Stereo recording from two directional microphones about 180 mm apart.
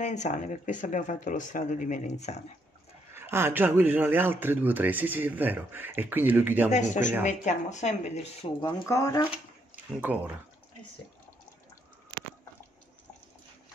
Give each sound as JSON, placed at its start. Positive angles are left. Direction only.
{"t": 0.0, "sound": "speech", "side_deg": 40}
{"t": 3.2, "sound": "speech", "side_deg": -15}
{"t": 6.7, "sound": "speech", "side_deg": 40}
{"t": 9.9, "sound": "speech", "side_deg": -10}